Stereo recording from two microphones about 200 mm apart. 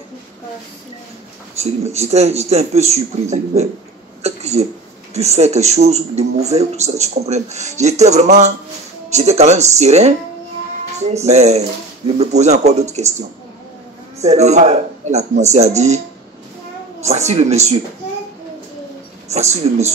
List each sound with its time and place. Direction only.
1.6 s speech: 35° right (ahead or behind)
14.2 s speech: 35° right (ahead or behind)
17.0 s speech: 35° right (ahead or behind)
19.3 s speech: 35° right (ahead or behind)